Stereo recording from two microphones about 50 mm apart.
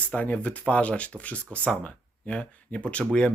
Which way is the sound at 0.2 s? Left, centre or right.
Left.